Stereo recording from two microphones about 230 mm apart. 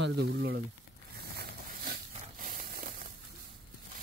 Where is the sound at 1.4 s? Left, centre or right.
Right.